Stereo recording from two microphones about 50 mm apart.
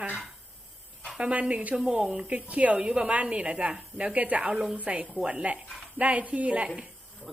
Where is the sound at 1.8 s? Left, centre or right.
Centre.